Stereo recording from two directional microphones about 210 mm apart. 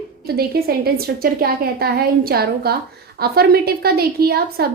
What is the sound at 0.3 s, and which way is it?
A woman's voice, 45° right (ahead or behind).